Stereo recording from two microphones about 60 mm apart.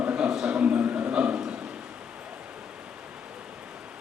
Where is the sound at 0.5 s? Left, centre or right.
Right.